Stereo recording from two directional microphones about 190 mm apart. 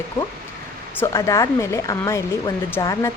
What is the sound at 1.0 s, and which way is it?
Speech, 15° left (ahead or behind).